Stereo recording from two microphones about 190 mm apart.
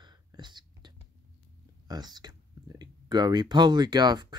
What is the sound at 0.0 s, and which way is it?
Whispering, 25° right (ahead or behind).